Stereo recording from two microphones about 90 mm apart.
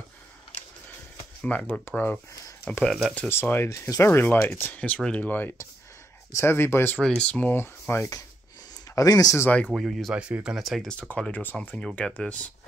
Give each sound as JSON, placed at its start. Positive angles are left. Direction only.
{"t": 1.4, "sound": "speech", "side_deg": 15}
{"t": 2.8, "sound": "speech", "side_deg": 5}
{"t": 3.3, "sound": "speech", "side_deg": 25}
{"t": 7.0, "sound": "speech", "side_deg": 10}
{"t": 7.5, "sound": "speech", "side_deg": 30}
{"t": 9.7, "sound": "speech", "side_deg": 0}
{"t": 10.1, "sound": "speech", "side_deg": -15}